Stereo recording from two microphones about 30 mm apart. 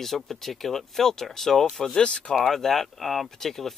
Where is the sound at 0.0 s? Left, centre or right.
Centre.